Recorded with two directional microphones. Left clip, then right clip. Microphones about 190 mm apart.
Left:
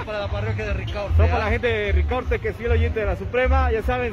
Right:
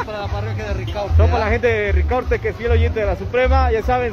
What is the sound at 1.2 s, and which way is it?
Speech, 20° left (ahead or behind).